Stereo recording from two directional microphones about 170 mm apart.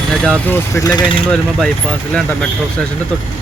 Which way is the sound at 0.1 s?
5° left (ahead or behind).